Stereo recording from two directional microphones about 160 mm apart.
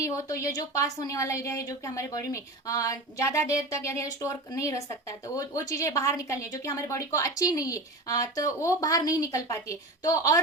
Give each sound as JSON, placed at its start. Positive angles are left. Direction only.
{"t": 0.0, "sound": "a woman's voice", "side_deg": 20}